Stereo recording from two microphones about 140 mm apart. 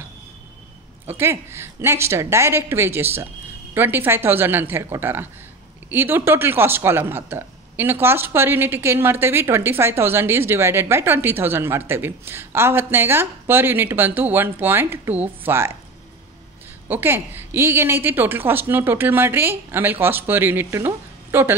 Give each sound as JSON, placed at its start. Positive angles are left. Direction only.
{"t": 1.0, "sound": "speech", "side_deg": -15}
{"t": 16.9, "sound": "speech", "side_deg": -15}